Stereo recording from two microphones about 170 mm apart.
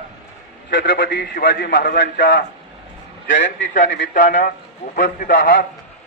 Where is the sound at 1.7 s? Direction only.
60° left (ahead or behind).